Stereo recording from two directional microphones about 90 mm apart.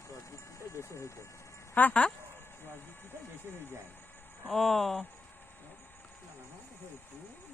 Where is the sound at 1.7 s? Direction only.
15° left (ahead or behind).